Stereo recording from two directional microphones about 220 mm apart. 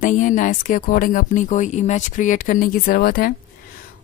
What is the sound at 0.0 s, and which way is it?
A woman's voice, 35° left (ahead or behind).